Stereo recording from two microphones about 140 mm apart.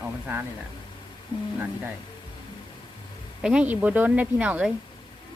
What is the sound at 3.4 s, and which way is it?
Speech, 5° right (ahead or behind).